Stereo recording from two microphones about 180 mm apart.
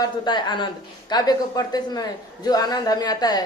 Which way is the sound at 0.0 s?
25° left (ahead or behind).